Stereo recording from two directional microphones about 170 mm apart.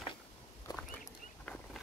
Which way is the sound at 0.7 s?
25° left (ahead or behind).